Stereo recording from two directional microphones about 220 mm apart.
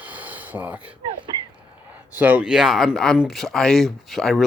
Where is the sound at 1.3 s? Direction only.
20° right (ahead or behind).